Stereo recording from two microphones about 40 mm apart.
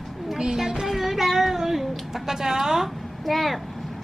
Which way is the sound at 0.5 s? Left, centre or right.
Centre.